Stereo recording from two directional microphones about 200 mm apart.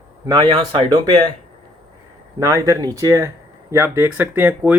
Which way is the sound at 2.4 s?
15° right (ahead or behind).